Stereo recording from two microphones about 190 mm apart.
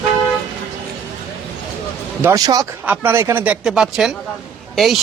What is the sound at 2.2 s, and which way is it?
A man's voice, 15° right (ahead or behind).